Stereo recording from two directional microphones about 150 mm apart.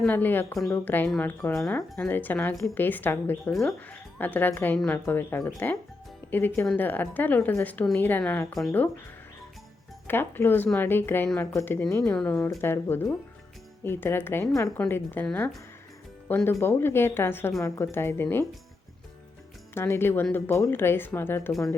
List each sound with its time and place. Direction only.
0.0 s speech: 10° left (ahead or behind)
3.5 s speech: centre (ahead or behind)
4.2 s speech: 10° left (ahead or behind)
10.1 s speech: 15° left (ahead or behind)
19.7 s speech: 15° left (ahead or behind)